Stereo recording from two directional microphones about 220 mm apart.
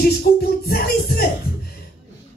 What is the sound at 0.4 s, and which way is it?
Music, 45° left (ahead or behind).